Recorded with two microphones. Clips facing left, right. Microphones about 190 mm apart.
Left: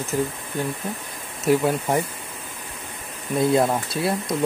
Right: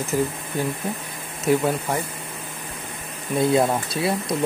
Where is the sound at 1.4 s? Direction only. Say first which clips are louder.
Left 1 dB; centre (ahead or behind).